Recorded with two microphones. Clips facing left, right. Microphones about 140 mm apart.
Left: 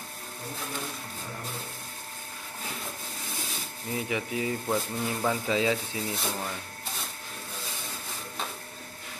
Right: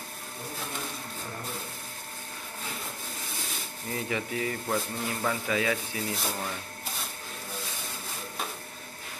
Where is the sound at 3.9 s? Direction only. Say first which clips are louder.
Left 1 dB; 15° left (ahead or behind).